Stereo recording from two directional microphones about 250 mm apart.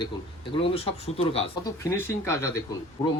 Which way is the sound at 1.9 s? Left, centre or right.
Centre.